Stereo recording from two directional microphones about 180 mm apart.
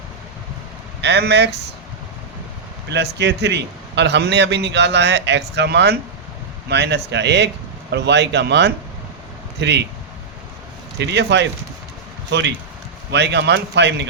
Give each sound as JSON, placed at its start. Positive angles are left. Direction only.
{"t": 1.0, "sound": "a man's voice", "side_deg": -70}
{"t": 3.2, "sound": "a man's voice", "side_deg": -70}
{"t": 10.9, "sound": "a man's voice", "side_deg": -70}